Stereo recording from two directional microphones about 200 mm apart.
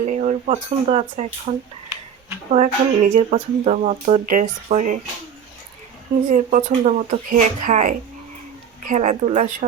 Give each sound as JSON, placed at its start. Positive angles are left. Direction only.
{"t": 0.0, "sound": "speech", "side_deg": -35}
{"t": 2.5, "sound": "a woman's voice", "side_deg": -35}
{"t": 6.3, "sound": "a woman's voice", "side_deg": -40}